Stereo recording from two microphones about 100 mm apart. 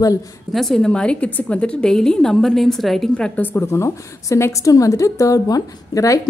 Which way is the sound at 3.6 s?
30° left (ahead or behind).